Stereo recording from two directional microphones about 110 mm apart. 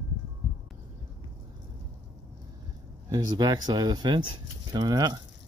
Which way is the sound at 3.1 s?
40° right (ahead or behind).